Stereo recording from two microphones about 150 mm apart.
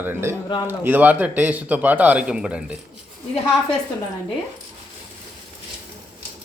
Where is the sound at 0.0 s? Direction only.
15° right (ahead or behind).